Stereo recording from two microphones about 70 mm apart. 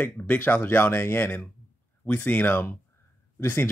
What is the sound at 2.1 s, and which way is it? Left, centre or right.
Speech, left.